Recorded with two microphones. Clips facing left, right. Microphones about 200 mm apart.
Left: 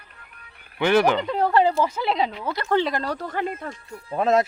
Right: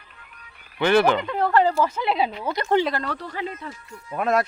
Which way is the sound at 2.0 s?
5° right (ahead or behind).